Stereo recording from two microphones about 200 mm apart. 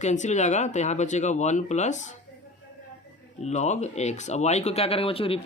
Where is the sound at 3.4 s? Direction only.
35° left (ahead or behind).